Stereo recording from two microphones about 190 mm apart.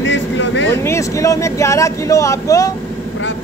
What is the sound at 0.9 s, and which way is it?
Speech, 15° left (ahead or behind).